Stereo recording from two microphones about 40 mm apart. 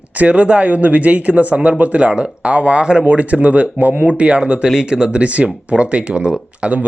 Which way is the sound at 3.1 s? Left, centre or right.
Right.